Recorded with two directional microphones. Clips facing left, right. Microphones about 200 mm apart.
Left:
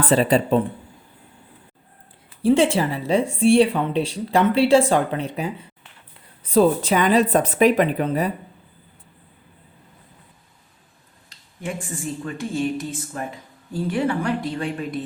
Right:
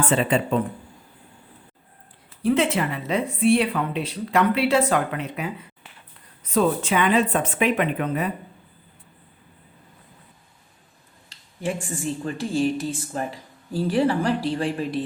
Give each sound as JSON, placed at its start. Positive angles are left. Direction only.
{"t": 0.0, "sound": "speech", "side_deg": 35}
{"t": 2.4, "sound": "a woman's voice", "side_deg": 30}
{"t": 11.3, "sound": "a sound", "side_deg": -30}
{"t": 12.2, "sound": "speech", "side_deg": -30}